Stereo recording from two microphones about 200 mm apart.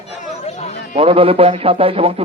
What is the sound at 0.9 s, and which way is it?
Speech, 30° right (ahead or behind).